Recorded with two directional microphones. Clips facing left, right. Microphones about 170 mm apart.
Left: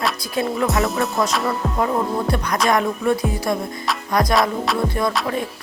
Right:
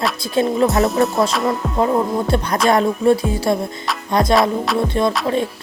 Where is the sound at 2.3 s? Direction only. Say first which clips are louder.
Right 4 dB; 30° right (ahead or behind).